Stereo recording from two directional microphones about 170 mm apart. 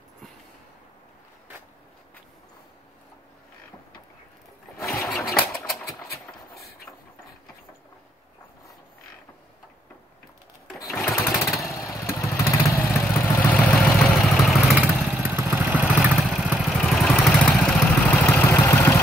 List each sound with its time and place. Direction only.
5.0 s sewing machine: centre (ahead or behind)
11.1 s lawn mower: 15° left (ahead or behind)
11.6 s motorcycle: 20° left (ahead or behind)
12.1 s vehicle: 15° left (ahead or behind); by 15.2 s 5° right (ahead or behind)
15.2 s vehicle: 15° right (ahead or behind); by 18.9 s 15° left (ahead or behind)